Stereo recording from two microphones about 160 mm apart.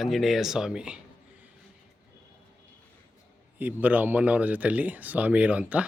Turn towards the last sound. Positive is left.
turn(degrees=-10)  # may be behind; listen again after turning